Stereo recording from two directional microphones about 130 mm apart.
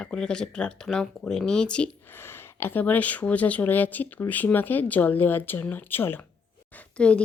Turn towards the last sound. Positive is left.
turn(degrees=10)  # may be behind; listen again after turning